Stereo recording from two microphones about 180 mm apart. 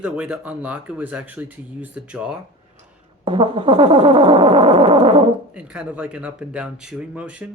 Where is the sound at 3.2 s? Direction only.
30° right (ahead or behind).